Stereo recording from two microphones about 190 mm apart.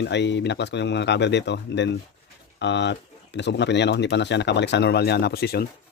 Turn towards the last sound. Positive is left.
turn(degrees=55)  # may be behind; listen again after turning